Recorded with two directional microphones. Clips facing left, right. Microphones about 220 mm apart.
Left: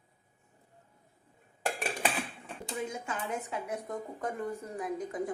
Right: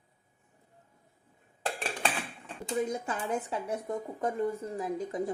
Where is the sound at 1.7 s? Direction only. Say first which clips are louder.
Left 1 dB; 10° left (ahead or behind).